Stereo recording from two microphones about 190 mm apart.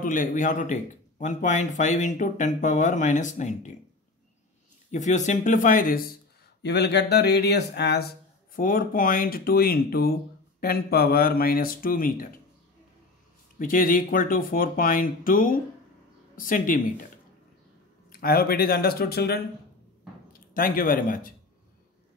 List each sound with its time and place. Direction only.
0.0 s speech: 45° left (ahead or behind)
4.9 s speech: 40° left (ahead or behind)
6.6 s speech: 65° left (ahead or behind)
8.5 s speech: 45° left (ahead or behind)
13.6 s speech: 45° left (ahead or behind)
18.1 s speech: 50° left (ahead or behind)
20.5 s speech: 45° left (ahead or behind)